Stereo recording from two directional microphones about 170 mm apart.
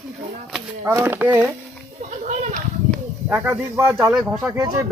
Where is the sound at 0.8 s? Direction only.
15° right (ahead or behind).